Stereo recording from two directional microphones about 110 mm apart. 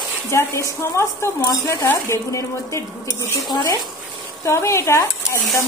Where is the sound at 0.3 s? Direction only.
25° left (ahead or behind).